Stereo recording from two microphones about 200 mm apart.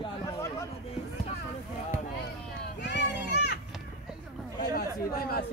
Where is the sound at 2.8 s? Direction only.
60° left (ahead or behind).